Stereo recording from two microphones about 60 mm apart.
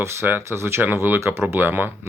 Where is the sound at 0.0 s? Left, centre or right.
Right.